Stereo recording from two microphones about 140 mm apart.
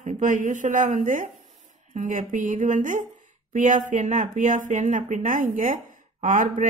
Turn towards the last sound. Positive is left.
turn(degrees=-70)  # may be behind; listen again after turning